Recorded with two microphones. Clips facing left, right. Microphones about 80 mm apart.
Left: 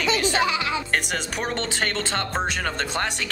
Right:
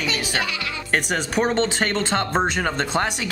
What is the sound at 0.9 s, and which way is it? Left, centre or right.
Speech, right.